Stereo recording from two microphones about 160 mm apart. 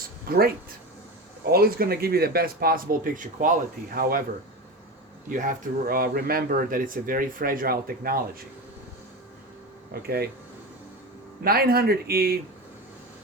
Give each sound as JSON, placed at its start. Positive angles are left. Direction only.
{"t": 0.3, "sound": "speech", "side_deg": -70}
{"t": 5.3, "sound": "speech", "side_deg": -55}
{"t": 9.9, "sound": "speech", "side_deg": -75}
{"t": 11.4, "sound": "speech", "side_deg": -70}